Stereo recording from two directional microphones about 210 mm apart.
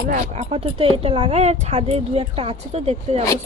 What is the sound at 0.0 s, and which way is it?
Speech, 40° right (ahead or behind).